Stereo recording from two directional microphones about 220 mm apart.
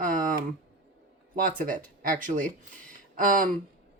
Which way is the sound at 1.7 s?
40° right (ahead or behind).